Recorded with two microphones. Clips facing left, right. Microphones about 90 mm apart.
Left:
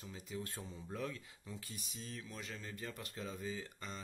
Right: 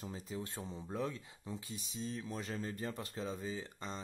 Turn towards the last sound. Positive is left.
turn(degrees=-25)  # may be behind; listen again after turning